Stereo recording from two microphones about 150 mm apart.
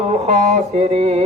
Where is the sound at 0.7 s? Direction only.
45° right (ahead or behind).